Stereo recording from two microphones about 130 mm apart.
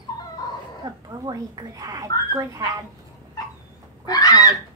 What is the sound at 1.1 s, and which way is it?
A woman's voice, 30° right (ahead or behind).